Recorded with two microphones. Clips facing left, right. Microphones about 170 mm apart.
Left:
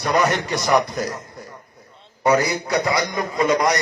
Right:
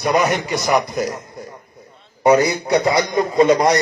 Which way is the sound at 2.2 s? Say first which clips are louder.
Right 4 dB; 20° right (ahead or behind).